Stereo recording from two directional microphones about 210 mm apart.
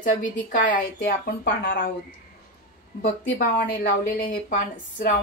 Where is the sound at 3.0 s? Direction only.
45° left (ahead or behind).